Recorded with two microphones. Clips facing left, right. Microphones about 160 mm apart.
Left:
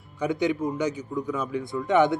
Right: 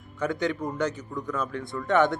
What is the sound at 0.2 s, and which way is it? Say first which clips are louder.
A man's voice: left 3 dB; 15° left (ahead or behind).